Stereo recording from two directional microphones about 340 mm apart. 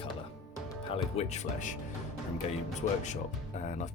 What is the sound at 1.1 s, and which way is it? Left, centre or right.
Speech, centre.